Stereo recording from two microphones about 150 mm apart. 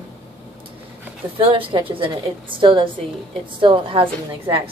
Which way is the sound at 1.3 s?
35° right (ahead or behind).